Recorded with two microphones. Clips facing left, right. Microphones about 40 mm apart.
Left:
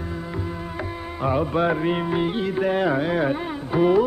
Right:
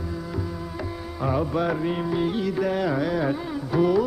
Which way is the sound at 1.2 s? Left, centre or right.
Left.